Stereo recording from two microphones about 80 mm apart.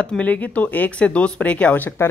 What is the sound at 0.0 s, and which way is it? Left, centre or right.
Speech, centre.